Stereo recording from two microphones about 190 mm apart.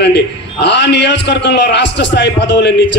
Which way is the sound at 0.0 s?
65° left (ahead or behind).